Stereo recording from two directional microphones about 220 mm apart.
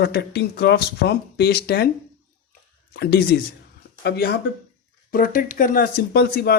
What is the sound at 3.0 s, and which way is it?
Speech, 45° left (ahead or behind).